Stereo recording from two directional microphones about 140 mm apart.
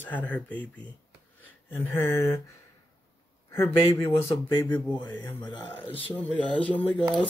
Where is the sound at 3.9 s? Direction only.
20° left (ahead or behind).